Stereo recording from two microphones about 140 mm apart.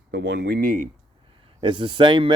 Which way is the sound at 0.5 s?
75° right (ahead or behind).